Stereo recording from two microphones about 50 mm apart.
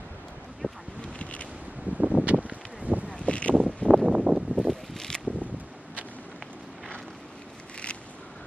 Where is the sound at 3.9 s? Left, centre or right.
Right.